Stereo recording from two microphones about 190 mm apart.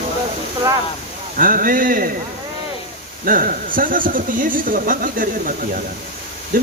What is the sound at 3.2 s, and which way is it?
Speech, 45° right (ahead or behind).